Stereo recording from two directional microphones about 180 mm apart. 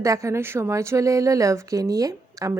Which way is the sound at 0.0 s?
15° right (ahead or behind).